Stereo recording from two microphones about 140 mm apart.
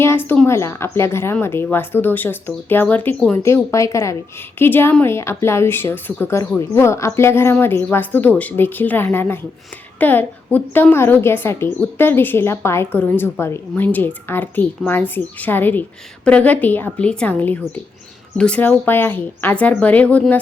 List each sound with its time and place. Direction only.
0.0 s a woman's voice: 15° left (ahead or behind)
3.4 s a woman's voice: 20° left (ahead or behind)